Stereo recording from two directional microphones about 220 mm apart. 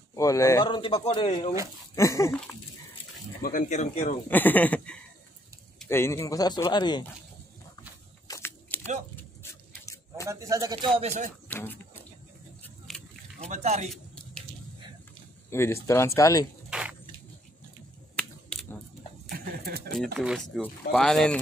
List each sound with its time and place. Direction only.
0.1 s speech: 15° left (ahead or behind)
3.4 s speech: 35° left (ahead or behind)
4.3 s speech: 10° left (ahead or behind)
8.3 s a sound: 10° left (ahead or behind)
10.2 s speech: 15° right (ahead or behind)
11.0 s speech: 35° right (ahead or behind)
11.4 s speech: 10° left (ahead or behind)
12.6 s a sound: 5° left (ahead or behind)
13.4 s speech: 30° right (ahead or behind)
15.5 s speech: 10° left (ahead or behind)
18.1 s a sound: 5° left (ahead or behind)
19.3 s a sound: 45° right (ahead or behind)
20.2 s speech: centre (ahead or behind)